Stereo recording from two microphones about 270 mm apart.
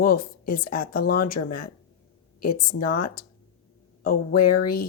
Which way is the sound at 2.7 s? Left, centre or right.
Left.